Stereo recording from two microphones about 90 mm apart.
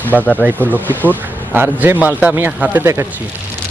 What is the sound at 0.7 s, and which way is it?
Speech, 20° right (ahead or behind).